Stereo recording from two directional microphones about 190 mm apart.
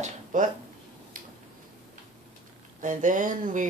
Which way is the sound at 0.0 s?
40° right (ahead or behind).